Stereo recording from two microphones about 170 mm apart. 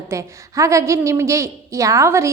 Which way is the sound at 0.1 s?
20° right (ahead or behind).